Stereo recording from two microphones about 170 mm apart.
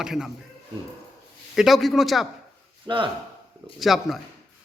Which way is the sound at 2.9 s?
25° right (ahead or behind).